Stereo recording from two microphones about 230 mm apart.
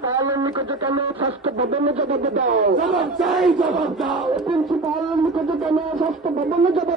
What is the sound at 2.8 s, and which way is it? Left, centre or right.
Battle cry, centre.